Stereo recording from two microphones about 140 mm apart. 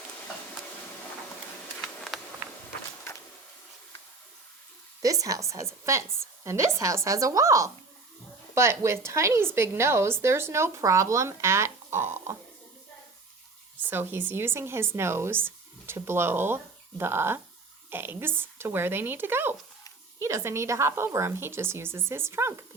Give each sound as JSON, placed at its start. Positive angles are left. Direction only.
{"t": 1.8, "sound": "a sound", "side_deg": 5}
{"t": 5.0, "sound": "speech", "side_deg": -25}
{"t": 13.8, "sound": "speech", "side_deg": -15}